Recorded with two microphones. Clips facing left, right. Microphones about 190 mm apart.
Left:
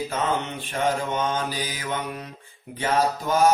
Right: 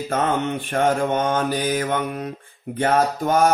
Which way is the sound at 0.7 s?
55° right (ahead or behind).